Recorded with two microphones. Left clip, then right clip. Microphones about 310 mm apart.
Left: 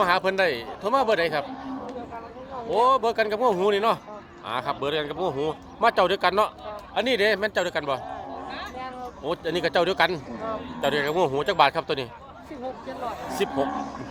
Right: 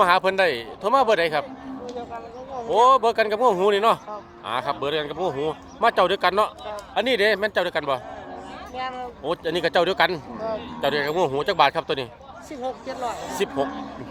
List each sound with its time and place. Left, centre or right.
0.0 s speech: centre
2.6 s speech: centre
9.2 s speech: centre
13.4 s speech: centre